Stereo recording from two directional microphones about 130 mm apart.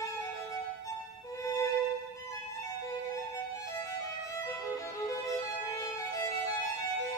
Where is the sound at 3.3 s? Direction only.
25° left (ahead or behind).